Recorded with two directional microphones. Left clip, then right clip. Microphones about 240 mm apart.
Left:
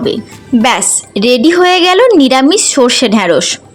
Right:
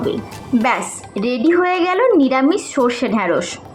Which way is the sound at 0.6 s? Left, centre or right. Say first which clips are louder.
Left 8 dB; left.